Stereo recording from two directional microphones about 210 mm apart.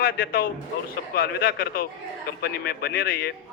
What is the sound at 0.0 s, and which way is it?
A man's voice, 45° left (ahead or behind).